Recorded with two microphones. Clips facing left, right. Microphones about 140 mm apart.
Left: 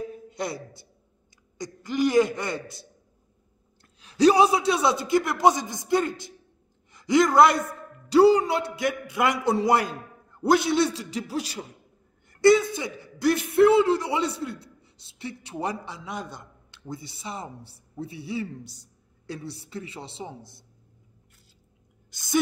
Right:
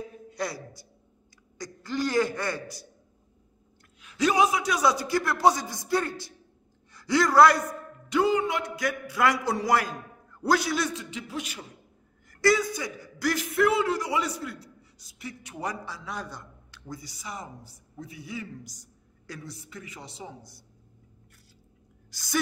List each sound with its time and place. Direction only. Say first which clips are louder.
0.3 s a woman's voice: right 1 dB; 25° left (ahead or behind)
4.0 s a man's voice: left 5 dB; 35° left (ahead or behind)
22.1 s a woman's voice: left 5 dB; 20° left (ahead or behind)